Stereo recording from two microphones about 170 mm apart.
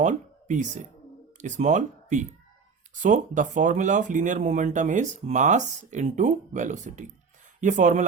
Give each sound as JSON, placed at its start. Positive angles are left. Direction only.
{"t": 0.0, "sound": "speech", "side_deg": -45}